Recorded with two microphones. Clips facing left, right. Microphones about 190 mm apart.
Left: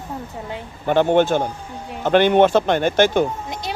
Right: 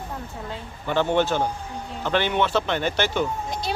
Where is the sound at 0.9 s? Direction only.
55° left (ahead or behind).